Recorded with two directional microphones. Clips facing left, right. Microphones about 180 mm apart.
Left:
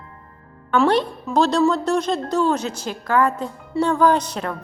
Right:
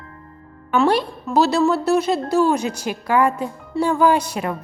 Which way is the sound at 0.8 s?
10° right (ahead or behind).